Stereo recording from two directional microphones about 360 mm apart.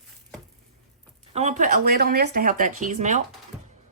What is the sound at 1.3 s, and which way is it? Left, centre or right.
Speech, centre.